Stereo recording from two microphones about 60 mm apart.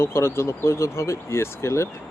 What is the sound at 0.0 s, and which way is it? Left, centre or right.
Speech, left.